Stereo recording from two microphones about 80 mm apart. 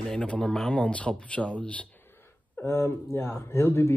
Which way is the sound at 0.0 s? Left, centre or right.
Centre.